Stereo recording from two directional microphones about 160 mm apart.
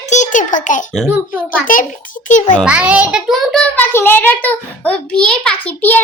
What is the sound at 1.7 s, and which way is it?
Speech, 55° left (ahead or behind).